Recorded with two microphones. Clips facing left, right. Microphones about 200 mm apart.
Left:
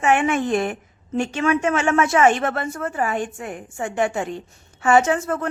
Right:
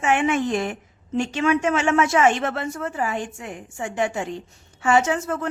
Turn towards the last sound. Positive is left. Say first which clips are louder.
# left 2 dB
turn(degrees=55)  # may be behind; listen again after turning